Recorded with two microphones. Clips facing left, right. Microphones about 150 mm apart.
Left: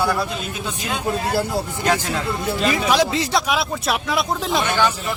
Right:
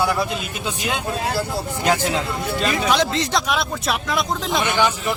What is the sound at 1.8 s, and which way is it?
Speech, 20° right (ahead or behind).